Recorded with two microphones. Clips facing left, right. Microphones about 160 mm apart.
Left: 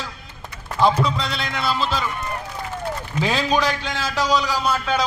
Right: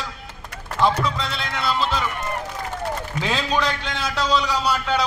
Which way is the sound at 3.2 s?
10° left (ahead or behind).